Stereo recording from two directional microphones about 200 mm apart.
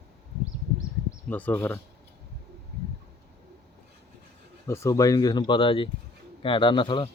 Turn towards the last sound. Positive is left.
turn(degrees=25)  # may be behind; listen again after turning